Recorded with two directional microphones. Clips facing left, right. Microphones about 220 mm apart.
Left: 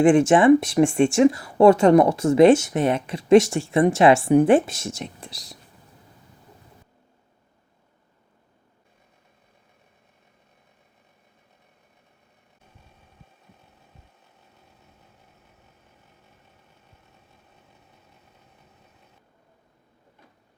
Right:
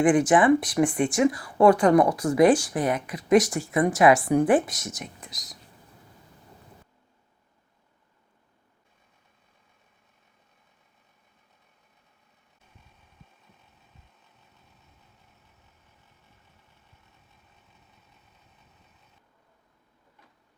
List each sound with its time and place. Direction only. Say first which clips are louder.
0.0 s speech: left 4 dB; 25° left (ahead or behind)